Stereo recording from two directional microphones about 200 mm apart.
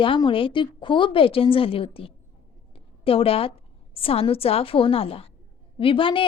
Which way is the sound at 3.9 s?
30° left (ahead or behind).